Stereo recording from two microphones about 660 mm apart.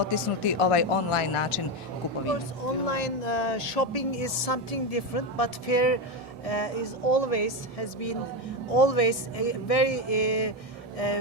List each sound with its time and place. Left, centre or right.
0.1 s speech: left
2.6 s speech: left